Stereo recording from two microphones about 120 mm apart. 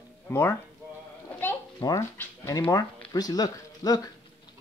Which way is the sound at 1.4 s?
20° left (ahead or behind).